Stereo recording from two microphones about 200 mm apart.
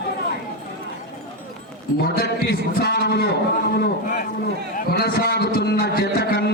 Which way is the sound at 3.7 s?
45° left (ahead or behind).